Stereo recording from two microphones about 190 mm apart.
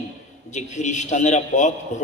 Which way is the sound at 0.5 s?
40° left (ahead or behind).